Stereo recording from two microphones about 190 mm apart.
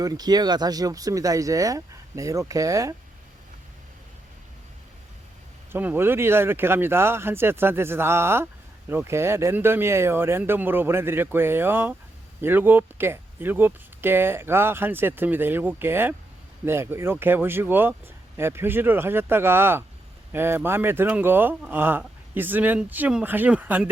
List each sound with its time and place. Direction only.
0.0 s speech: 20° right (ahead or behind)
5.7 s speech: 10° right (ahead or behind)